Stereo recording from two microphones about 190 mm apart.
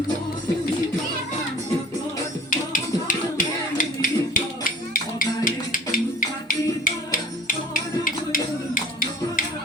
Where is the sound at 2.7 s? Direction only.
45° left (ahead or behind).